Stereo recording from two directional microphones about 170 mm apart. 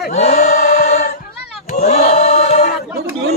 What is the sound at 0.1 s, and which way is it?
Chant, 40° left (ahead or behind).